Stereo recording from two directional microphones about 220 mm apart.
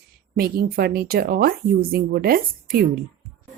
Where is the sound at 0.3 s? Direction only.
45° right (ahead or behind).